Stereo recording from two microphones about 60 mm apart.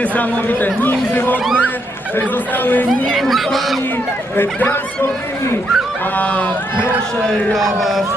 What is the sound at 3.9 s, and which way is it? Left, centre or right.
Speech, left.